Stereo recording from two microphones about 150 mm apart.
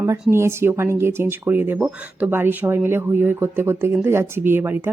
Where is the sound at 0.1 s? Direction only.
15° right (ahead or behind).